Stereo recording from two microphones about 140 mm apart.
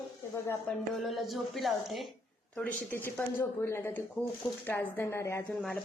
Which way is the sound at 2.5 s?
10° left (ahead or behind).